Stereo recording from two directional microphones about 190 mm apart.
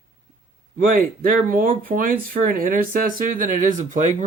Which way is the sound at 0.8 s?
50° right (ahead or behind).